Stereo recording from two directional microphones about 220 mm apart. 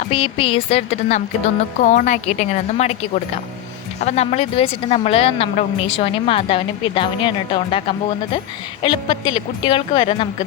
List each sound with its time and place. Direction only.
0.0 s a woman's voice: 25° left (ahead or behind)